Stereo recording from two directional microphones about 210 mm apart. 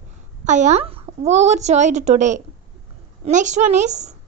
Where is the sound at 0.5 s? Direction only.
35° right (ahead or behind).